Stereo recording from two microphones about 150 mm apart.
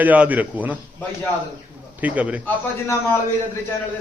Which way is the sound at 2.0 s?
10° right (ahead or behind).